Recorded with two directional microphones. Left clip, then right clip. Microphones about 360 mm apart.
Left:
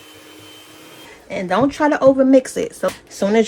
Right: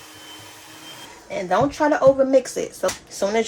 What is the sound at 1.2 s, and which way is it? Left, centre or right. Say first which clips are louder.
Speech: left 2 dB; left.